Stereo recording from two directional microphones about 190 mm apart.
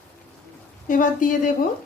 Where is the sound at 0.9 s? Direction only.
45° left (ahead or behind).